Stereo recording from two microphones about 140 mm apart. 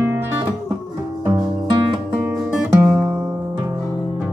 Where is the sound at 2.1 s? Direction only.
10° right (ahead or behind).